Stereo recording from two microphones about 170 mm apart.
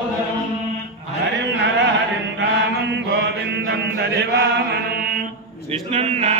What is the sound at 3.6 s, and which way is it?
Mantra, 70° right (ahead or behind).